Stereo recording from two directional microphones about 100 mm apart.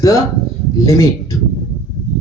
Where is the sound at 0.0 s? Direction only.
35° left (ahead or behind).